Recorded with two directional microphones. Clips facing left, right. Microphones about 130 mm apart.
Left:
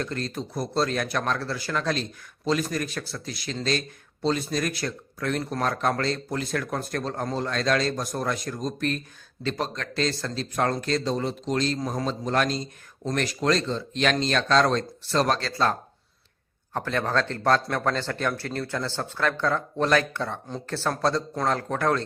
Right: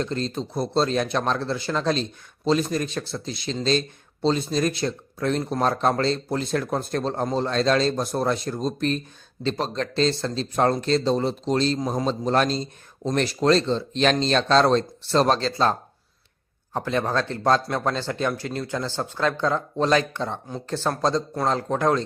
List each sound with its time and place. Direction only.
0.0 s a man's voice: 25° right (ahead or behind)
16.7 s a man's voice: 15° right (ahead or behind)